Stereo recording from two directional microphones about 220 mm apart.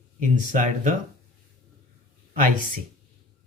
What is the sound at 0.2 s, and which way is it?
Speech, 35° right (ahead or behind).